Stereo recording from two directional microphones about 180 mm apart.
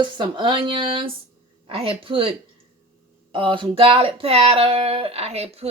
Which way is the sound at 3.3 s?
25° right (ahead or behind).